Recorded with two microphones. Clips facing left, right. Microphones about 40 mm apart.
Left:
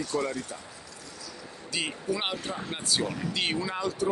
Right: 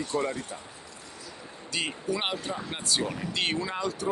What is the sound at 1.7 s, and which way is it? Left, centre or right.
Speech, centre.